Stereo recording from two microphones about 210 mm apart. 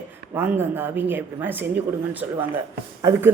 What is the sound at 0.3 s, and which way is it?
Speech, 10° right (ahead or behind).